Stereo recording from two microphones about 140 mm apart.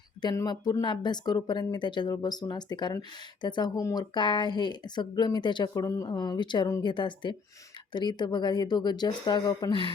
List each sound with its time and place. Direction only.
0.2 s speech: 30° left (ahead or behind)